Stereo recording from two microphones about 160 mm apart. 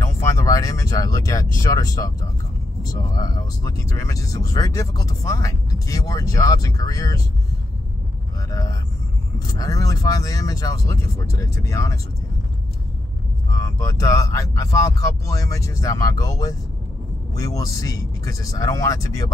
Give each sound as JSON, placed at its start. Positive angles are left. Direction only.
{"t": 0.0, "sound": "speech", "side_deg": 20}
{"t": 8.5, "sound": "speech", "side_deg": 20}
{"t": 13.5, "sound": "speech", "side_deg": 20}